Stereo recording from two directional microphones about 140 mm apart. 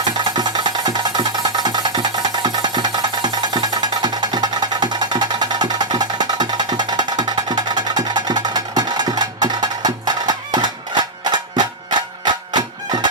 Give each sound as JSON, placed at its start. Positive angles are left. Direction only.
{"t": 0.3, "sound": "music", "side_deg": -30}
{"t": 1.7, "sound": "music", "side_deg": -30}